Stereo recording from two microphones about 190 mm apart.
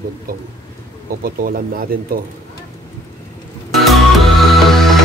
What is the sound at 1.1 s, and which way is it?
Speech, 50° right (ahead or behind).